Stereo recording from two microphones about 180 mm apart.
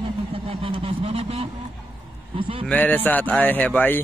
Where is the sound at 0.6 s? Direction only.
30° right (ahead or behind).